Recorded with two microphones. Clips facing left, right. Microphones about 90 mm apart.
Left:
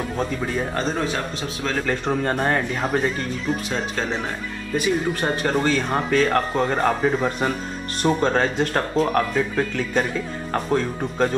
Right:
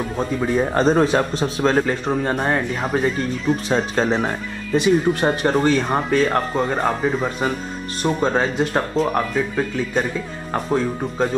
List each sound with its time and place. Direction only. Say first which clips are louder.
0.2 s speech: right 6 dB; 10° right (ahead or behind)
0.7 s a man's voice: right 11 dB; 40° right (ahead or behind)
2.2 s speech: right 1 dB; 15° right (ahead or behind)
3.6 s a man's voice: right 6 dB; 35° right (ahead or behind)
4.7 s speech: right 5 dB; 20° right (ahead or behind)